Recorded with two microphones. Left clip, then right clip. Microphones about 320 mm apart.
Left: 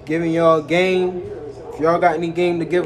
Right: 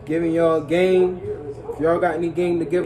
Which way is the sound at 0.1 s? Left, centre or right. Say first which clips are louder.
Left 3 dB; left.